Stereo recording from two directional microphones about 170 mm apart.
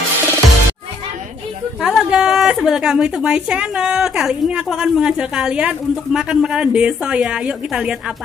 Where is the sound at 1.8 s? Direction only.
5° right (ahead or behind).